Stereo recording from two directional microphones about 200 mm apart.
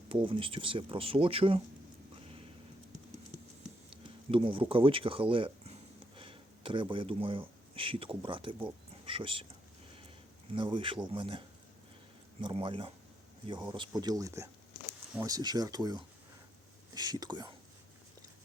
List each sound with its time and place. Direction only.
0.1 s speech: 25° right (ahead or behind)
4.3 s speech: 25° right (ahead or behind)
10.5 s speech: 25° right (ahead or behind)